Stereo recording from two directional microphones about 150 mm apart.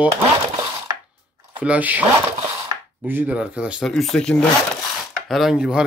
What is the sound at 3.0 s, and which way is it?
Speech, 10° right (ahead or behind).